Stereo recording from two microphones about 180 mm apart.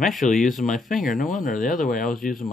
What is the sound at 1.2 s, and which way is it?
Speech, 45° left (ahead or behind).